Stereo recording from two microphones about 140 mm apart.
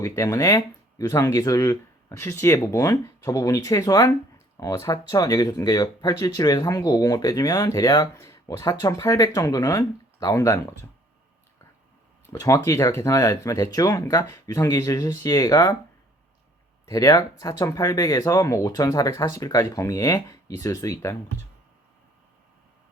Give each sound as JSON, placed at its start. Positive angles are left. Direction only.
{"t": 0.0, "sound": "speech", "side_deg": 25}
{"t": 12.3, "sound": "speech", "side_deg": 20}
{"t": 16.8, "sound": "speech", "side_deg": 25}